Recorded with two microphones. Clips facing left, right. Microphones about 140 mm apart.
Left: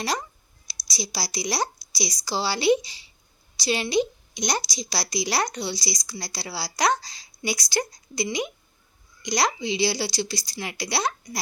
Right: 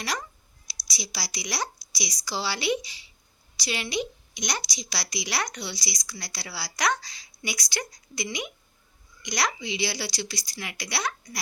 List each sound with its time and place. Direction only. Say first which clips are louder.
0.9 s a woman's voice: left 5 dB; 35° left (ahead or behind)